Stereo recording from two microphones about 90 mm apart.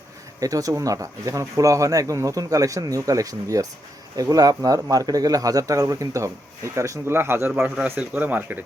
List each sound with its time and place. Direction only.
0.3 s speech: 40° right (ahead or behind); by 8.5 s 20° right (ahead or behind)